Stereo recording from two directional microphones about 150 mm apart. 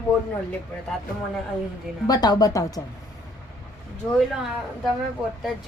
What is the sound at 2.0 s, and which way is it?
Speech, 25° left (ahead or behind).